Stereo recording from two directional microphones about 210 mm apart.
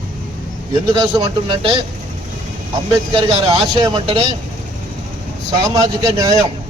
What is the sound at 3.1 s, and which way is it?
A man's voice, 25° right (ahead or behind).